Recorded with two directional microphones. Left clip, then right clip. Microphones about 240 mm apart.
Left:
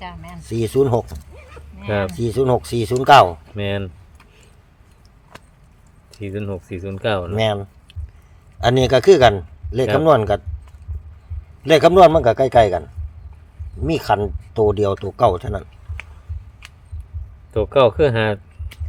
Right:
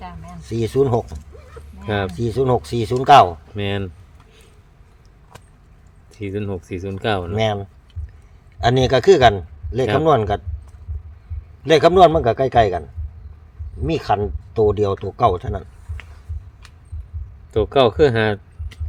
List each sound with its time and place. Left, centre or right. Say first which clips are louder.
0.4 s speech: left 1 dB; centre
2.1 s speech: even; centre
3.5 s speech: left 1 dB; centre
6.1 s speech: right 1 dB; centre
7.3 s speech: left 1 dB; centre
11.6 s speech: left 1 dB; centre
13.8 s speech: left 1 dB; centre
17.5 s speech: left 1 dB; centre